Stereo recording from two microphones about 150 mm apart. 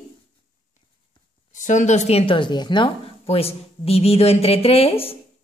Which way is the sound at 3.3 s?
40° left (ahead or behind).